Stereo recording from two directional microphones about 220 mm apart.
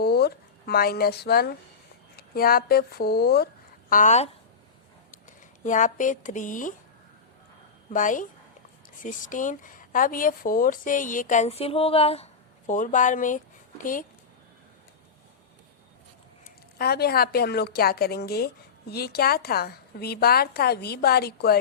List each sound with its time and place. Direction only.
0.0 s speech: 45° left (ahead or behind)
5.6 s speech: 35° left (ahead or behind)
7.9 s speech: 35° left (ahead or behind)
16.7 s a woman's voice: 45° left (ahead or behind)